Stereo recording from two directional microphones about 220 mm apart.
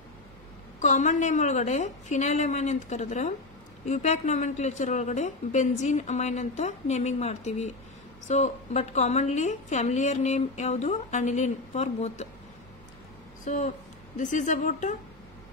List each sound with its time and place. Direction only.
0.7 s a woman's voice: 35° left (ahead or behind)
13.5 s a woman's voice: 35° left (ahead or behind)